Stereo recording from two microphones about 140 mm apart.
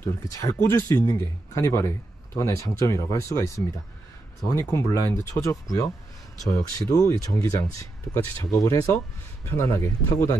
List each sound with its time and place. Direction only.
0.0 s speech: 20° left (ahead or behind)